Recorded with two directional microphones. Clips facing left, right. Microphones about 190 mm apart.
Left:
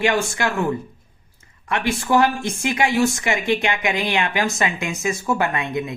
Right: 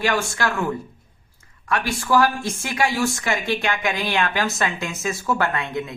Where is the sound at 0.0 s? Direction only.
20° left (ahead or behind).